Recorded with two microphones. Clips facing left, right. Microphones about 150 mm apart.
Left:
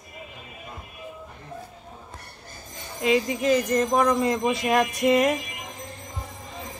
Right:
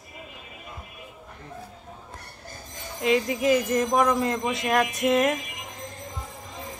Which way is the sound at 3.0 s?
Centre (ahead or behind).